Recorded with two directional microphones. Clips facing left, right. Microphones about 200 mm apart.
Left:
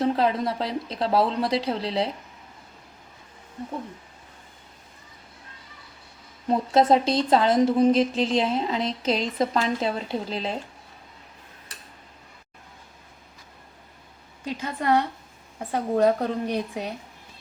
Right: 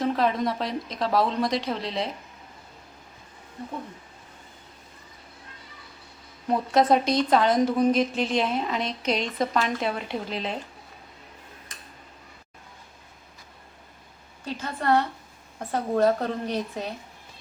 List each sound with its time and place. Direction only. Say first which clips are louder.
0.0 s a woman's voice: left 1 dB; 30° left (ahead or behind)
6.5 s a woman's voice: left 1 dB; 25° left (ahead or behind)
9.1 s a woman's voice: left 1 dB; centre (ahead or behind)
9.5 s a woman's voice: left 1 dB; 25° left (ahead or behind)
14.4 s speech: left 1 dB; 15° left (ahead or behind)